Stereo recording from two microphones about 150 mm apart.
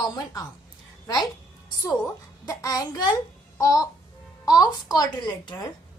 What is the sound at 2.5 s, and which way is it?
A woman's voice, 20° left (ahead or behind).